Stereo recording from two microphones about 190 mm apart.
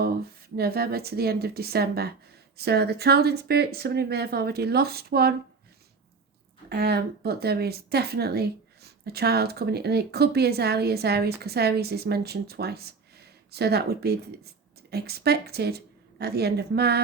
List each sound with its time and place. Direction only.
0.0 s speech: 55° right (ahead or behind)
6.7 s a woman's voice: 60° right (ahead or behind)